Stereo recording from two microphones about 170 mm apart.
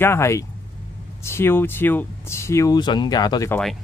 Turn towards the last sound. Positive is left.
turn(degrees=5)  # may be behind; listen again after turning